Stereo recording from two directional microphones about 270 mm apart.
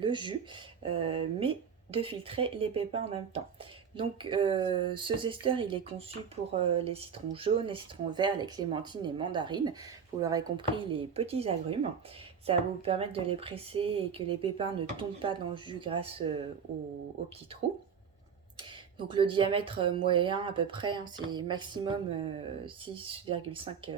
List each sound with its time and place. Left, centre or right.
0.0 s speech: centre
18.5 s speech: centre